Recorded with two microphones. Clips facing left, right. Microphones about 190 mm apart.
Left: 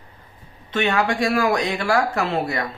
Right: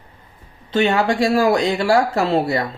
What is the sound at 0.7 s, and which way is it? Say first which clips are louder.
Speech: right 4 dB; 30° right (ahead or behind).